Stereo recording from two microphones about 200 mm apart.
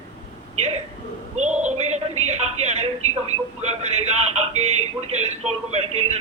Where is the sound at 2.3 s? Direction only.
35° right (ahead or behind).